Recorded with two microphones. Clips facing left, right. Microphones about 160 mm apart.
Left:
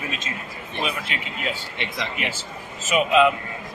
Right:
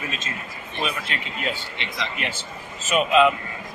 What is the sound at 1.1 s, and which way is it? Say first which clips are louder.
Speech: even; 10° left (ahead or behind).